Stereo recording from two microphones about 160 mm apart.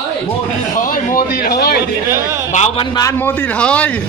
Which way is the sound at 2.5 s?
45° left (ahead or behind).